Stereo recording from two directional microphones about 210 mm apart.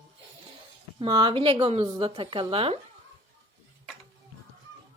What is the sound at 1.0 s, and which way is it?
A woman's voice, 20° right (ahead or behind).